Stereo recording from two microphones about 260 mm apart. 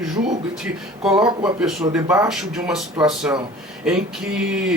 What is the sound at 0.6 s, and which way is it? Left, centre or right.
Speech, centre.